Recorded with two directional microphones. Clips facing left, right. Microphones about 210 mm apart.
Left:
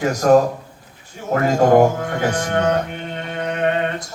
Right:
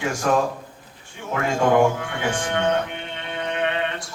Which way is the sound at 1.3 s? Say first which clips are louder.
Left 6 dB; 40° left (ahead or behind).